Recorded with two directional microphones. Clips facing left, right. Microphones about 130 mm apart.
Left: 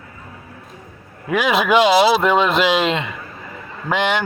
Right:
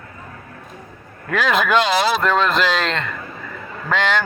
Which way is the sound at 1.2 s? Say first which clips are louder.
Left 2 dB; 10° left (ahead or behind).